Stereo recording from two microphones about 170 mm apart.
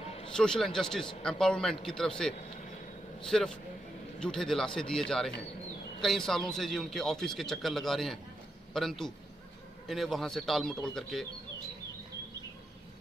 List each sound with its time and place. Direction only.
0.0 s a sound: 35° left (ahead or behind)
0.3 s a man's voice: 5° left (ahead or behind)
2.3 s vehicle: 50° left (ahead or behind)
3.2 s a man's voice: 5° left (ahead or behind)